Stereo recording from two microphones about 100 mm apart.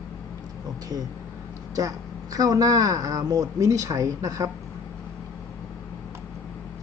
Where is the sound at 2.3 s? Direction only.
40° right (ahead or behind).